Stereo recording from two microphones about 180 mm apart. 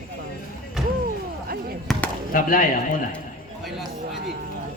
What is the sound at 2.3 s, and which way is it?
Speech, 50° left (ahead or behind).